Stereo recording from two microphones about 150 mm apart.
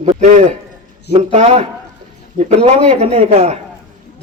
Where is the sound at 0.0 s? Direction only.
45° right (ahead or behind).